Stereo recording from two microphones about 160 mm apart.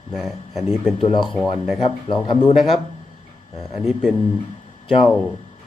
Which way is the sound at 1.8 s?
30° left (ahead or behind).